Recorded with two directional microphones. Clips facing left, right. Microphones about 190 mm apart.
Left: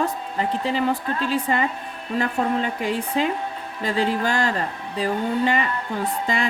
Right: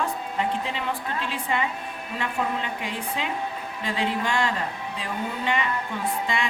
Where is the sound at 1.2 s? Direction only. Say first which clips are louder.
Left 6 dB; 40° left (ahead or behind).